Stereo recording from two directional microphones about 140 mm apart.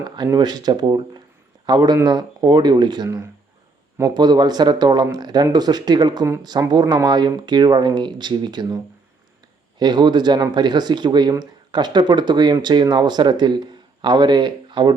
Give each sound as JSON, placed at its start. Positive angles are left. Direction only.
{"t": 0.2, "sound": "speech", "side_deg": -30}